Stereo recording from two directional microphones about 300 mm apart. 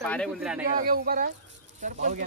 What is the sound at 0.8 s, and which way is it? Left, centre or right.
Speech, right.